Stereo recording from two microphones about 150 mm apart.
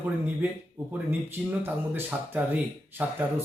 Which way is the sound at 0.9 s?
10° right (ahead or behind).